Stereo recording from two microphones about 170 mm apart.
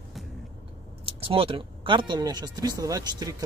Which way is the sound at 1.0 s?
35° right (ahead or behind).